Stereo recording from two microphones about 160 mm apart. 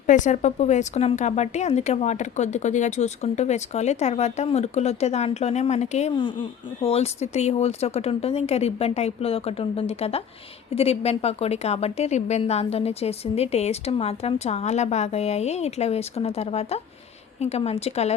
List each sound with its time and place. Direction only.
0.1 s a woman's voice: 50° left (ahead or behind)